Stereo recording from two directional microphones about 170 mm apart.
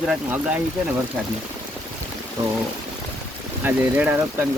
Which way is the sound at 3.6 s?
10° right (ahead or behind).